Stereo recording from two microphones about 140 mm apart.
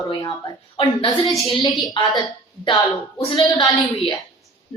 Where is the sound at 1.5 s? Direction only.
35° left (ahead or behind).